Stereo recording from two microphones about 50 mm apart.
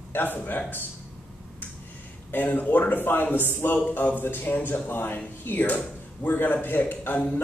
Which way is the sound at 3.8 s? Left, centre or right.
Left.